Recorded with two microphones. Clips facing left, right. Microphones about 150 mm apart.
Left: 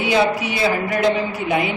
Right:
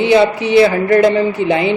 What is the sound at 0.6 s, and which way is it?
Speech, 75° right (ahead or behind).